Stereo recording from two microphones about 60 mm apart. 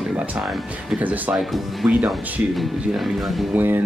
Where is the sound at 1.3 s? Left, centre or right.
Centre.